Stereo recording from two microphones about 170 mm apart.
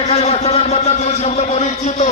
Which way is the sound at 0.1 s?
35° left (ahead or behind).